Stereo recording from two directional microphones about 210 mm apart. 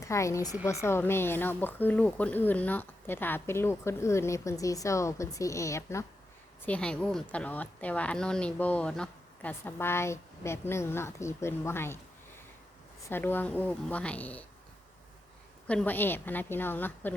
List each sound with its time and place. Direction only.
0.0 s speech: 15° left (ahead or behind)
13.1 s speech: 10° left (ahead or behind)
15.6 s speech: 5° left (ahead or behind)